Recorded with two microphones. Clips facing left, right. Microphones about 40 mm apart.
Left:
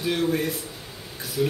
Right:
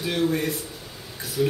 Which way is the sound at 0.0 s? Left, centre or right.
Centre.